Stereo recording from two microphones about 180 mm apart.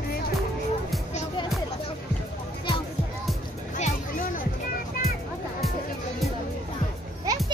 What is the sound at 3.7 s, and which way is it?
Music, 40° left (ahead or behind).